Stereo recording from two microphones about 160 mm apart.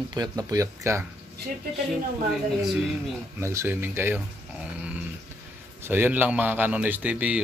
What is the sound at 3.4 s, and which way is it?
A man's voice, 15° right (ahead or behind).